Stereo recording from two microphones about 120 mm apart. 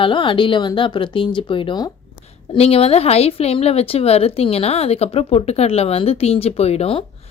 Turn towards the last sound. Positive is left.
turn(degrees=55)  # may be behind; listen again after turning